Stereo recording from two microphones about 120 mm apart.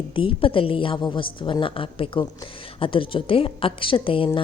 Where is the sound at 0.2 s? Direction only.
45° left (ahead or behind).